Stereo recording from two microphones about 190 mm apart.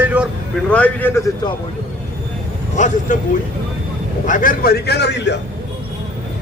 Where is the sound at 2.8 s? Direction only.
40° left (ahead or behind).